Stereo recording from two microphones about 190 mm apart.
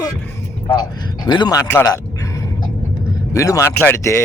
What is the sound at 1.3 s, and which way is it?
Speech, 20° left (ahead or behind).